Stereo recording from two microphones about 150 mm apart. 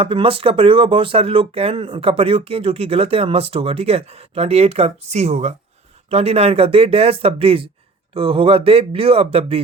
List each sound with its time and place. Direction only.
0.0 s speech: 35° right (ahead or behind)